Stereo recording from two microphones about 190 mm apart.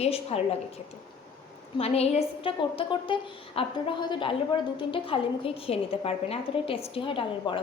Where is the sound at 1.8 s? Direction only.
30° left (ahead or behind).